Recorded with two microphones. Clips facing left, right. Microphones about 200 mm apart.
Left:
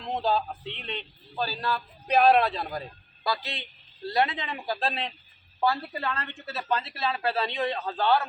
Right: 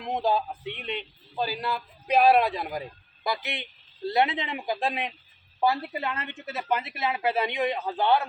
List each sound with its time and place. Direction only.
0.0 s a woman's voice: 15° right (ahead or behind)